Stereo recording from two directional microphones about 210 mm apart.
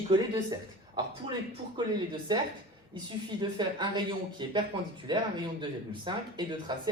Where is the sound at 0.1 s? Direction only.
20° right (ahead or behind).